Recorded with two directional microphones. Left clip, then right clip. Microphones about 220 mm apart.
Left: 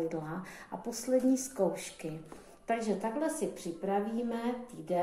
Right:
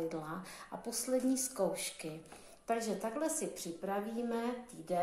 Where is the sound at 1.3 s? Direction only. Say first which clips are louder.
Left 5 dB; 25° right (ahead or behind).